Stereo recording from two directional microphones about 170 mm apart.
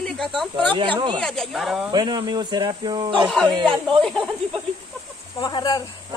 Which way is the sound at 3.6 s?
Centre (ahead or behind).